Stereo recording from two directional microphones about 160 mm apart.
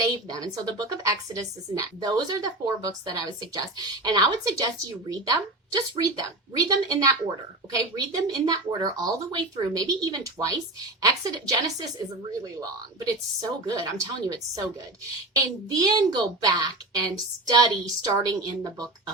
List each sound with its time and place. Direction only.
0.3 s a woman's voice: 25° right (ahead or behind)
15.7 s a woman's voice: 25° right (ahead or behind)